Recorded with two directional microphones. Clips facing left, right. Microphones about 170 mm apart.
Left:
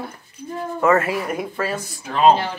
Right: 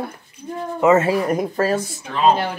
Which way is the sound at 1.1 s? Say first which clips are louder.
Right 5 dB; 40° right (ahead or behind).